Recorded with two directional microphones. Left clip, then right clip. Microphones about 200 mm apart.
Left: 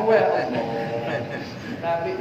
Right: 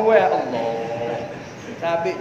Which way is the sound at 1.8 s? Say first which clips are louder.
Right 3 dB; 55° right (ahead or behind).